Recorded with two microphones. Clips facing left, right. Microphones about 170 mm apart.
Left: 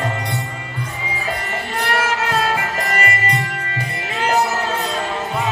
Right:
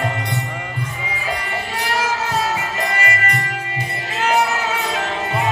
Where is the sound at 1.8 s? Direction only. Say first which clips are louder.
Left 2 dB; 55° left (ahead or behind).